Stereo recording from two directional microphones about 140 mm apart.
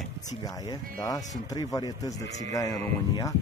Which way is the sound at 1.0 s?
25° left (ahead or behind).